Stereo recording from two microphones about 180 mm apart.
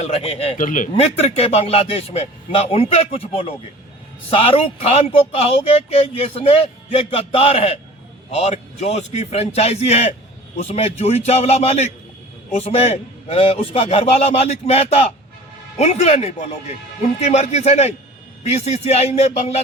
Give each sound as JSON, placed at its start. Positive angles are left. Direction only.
{"t": 0.0, "sound": "a man's voice", "side_deg": 30}
{"t": 0.6, "sound": "speech", "side_deg": 45}
{"t": 0.9, "sound": "a man's voice", "side_deg": 35}